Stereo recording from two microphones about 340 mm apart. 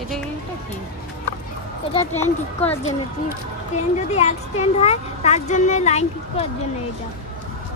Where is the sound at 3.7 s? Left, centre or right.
Centre.